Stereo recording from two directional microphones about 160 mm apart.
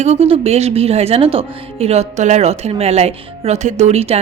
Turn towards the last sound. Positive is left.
turn(degrees=-40)  # may be behind; listen again after turning